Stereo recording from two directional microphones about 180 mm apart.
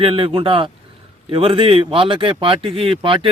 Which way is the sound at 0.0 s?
30° right (ahead or behind).